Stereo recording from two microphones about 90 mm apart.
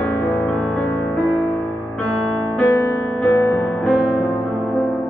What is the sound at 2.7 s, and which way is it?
Music, 25° left (ahead or behind).